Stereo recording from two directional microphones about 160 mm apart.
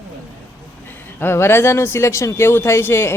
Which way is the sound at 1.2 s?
15° left (ahead or behind).